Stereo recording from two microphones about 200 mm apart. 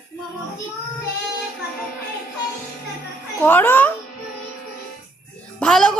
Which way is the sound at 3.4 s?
10° left (ahead or behind).